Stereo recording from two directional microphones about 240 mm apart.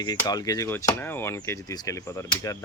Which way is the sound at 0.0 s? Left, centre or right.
Centre.